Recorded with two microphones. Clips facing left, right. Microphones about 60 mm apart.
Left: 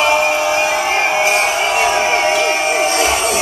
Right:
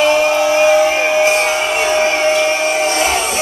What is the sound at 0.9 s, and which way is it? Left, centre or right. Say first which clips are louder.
Music: right 2 dB; centre.